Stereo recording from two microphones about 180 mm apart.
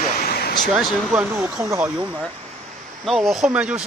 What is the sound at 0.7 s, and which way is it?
Speech, 5° right (ahead or behind).